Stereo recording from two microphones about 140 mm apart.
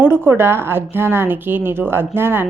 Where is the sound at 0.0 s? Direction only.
15° right (ahead or behind).